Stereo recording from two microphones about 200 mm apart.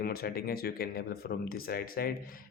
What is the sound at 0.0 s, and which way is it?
Speech, 50° left (ahead or behind).